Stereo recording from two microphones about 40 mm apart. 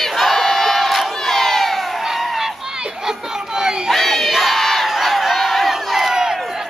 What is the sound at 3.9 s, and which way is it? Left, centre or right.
Crowd, centre.